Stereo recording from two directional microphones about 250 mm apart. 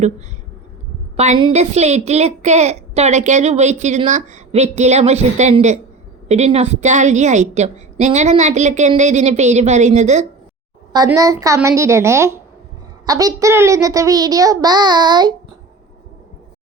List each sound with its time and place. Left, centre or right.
1.1 s a woman's voice: right
10.9 s a child's voice: centre